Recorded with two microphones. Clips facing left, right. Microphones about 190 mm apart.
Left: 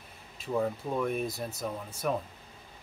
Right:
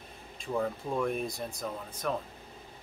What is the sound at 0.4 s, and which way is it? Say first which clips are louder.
Speech: left 2 dB; 5° left (ahead or behind).